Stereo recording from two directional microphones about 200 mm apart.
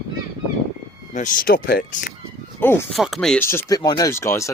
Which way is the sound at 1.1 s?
40° left (ahead or behind).